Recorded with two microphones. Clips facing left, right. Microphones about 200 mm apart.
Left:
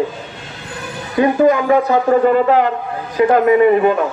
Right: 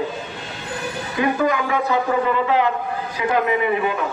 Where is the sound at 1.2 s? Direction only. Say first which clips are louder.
Left 8 dB; 40° left (ahead or behind).